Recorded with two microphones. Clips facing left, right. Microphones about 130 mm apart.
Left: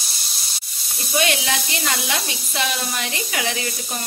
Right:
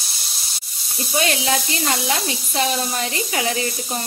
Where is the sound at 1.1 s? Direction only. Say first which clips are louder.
Right 1 dB; 30° right (ahead or behind).